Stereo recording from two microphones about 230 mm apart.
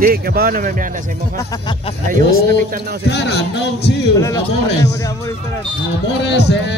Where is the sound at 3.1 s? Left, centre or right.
Left.